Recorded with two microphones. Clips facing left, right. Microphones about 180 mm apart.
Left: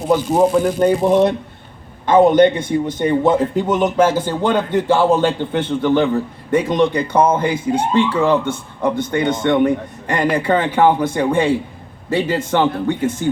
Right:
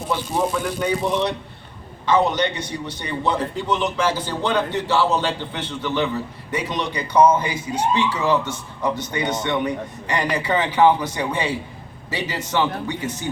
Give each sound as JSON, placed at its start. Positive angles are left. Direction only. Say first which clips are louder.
{"t": 0.1, "sound": "a man's voice", "louder": "left 9 dB", "side_deg": 45}